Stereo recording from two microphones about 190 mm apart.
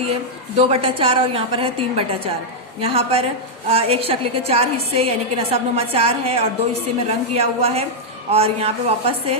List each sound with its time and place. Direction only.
0.1 s a woman's voice: 30° right (ahead or behind)